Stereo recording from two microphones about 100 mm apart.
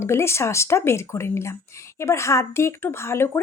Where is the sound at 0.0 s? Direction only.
25° left (ahead or behind).